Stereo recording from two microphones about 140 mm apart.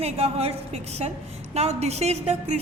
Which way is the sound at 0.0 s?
45° right (ahead or behind).